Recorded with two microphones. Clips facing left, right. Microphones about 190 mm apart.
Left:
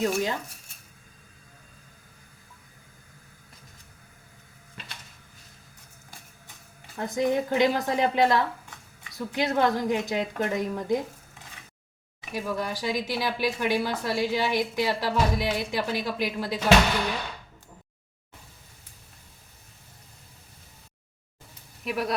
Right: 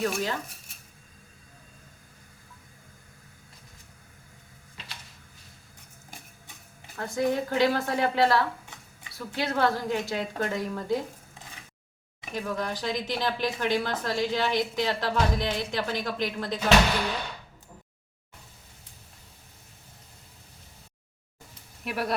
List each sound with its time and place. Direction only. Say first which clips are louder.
0.0 s speech: left 3 dB; 20° left (ahead or behind)
6.9 s a woman's voice: left 2 dB; 20° left (ahead or behind)
12.3 s speech: left 1 dB; 10° left (ahead or behind)
21.8 s speech: left 2 dB; centre (ahead or behind)